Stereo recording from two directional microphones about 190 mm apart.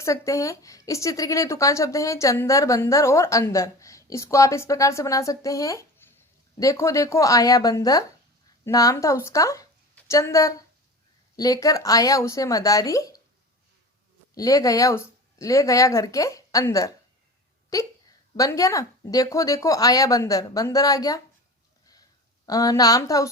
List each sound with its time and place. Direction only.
0.0 s a woman's voice: 15° left (ahead or behind)
14.3 s a woman's voice: 20° left (ahead or behind)
22.4 s a woman's voice: 20° left (ahead or behind)